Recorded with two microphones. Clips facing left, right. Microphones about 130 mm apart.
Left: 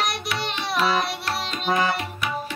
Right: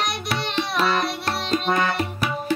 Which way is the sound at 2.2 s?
35° right (ahead or behind).